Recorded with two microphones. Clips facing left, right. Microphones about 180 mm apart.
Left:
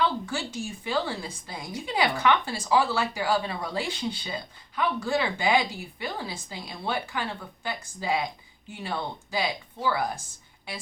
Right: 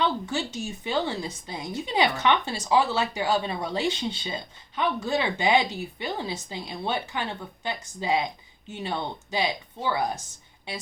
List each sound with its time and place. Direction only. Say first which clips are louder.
0.0 s a woman's voice: right 1 dB; 20° right (ahead or behind)